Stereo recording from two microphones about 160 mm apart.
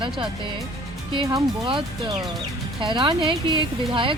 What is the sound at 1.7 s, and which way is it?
A woman's voice, 30° right (ahead or behind).